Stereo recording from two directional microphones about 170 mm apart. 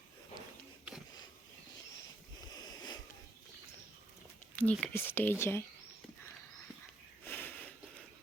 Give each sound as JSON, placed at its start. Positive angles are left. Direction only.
{"t": 2.5, "sound": "sniff", "side_deg": 25}
{"t": 4.5, "sound": "speech", "side_deg": 5}
{"t": 7.3, "sound": "a sound", "side_deg": 10}